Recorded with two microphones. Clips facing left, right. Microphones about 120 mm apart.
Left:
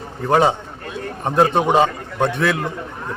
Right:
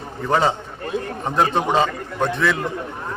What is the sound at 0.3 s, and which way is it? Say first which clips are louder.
A man's voice: left 3 dB; 15° left (ahead or behind).